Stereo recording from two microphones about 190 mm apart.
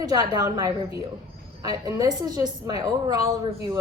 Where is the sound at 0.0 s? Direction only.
20° right (ahead or behind).